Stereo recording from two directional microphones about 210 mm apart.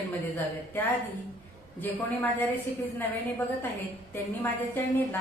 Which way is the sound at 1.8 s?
10° left (ahead or behind).